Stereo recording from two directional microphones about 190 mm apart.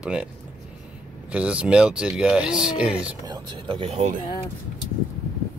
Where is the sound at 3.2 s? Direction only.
25° right (ahead or behind).